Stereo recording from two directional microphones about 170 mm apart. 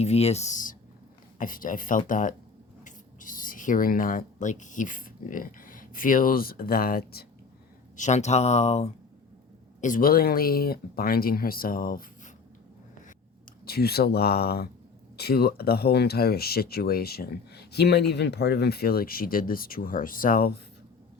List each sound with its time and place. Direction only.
0.0 s speech: 40° left (ahead or behind); by 7.3 s 65° left (ahead or behind)
7.9 s speech: 45° left (ahead or behind)
9.8 s speech: 55° left (ahead or behind)
13.7 s speech: 70° left (ahead or behind)